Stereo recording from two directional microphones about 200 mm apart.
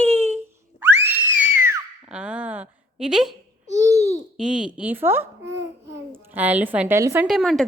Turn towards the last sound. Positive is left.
turn(degrees=0)  # may be behind; listen again after turning